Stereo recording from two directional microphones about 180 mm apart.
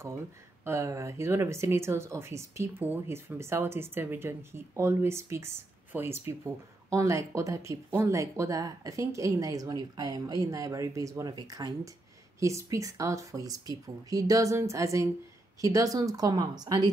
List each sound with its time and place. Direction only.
0.7 s speech: 15° right (ahead or behind)